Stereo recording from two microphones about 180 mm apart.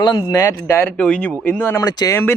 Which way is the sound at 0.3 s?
15° left (ahead or behind).